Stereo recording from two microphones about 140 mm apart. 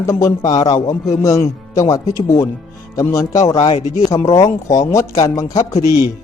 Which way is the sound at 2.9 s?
20° left (ahead or behind).